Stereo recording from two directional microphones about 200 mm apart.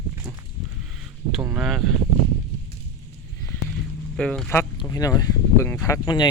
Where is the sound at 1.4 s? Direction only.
5° right (ahead or behind).